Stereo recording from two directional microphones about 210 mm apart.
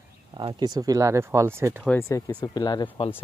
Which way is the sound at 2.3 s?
20° left (ahead or behind).